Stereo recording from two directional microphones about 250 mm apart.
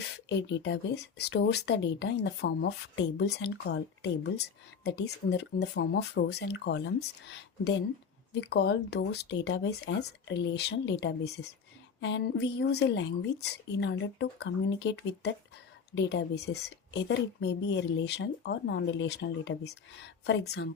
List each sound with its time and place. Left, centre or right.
0.3 s a woman's voice: left